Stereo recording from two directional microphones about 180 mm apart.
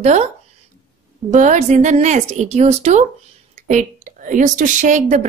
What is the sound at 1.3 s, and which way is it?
A woman's voice, 40° right (ahead or behind).